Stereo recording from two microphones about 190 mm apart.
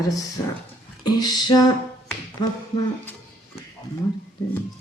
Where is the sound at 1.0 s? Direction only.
20° left (ahead or behind).